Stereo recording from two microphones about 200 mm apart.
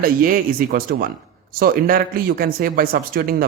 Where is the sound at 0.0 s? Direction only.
45° right (ahead or behind).